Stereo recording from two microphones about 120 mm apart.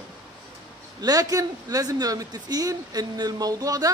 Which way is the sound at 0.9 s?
30° right (ahead or behind).